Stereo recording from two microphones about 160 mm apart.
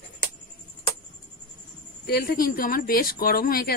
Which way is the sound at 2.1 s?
75° left (ahead or behind).